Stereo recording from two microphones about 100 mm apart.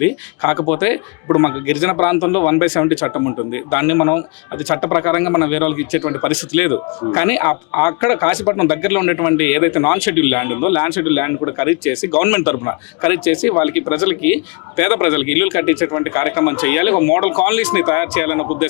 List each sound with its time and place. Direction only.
0.0 s speech: 25° left (ahead or behind)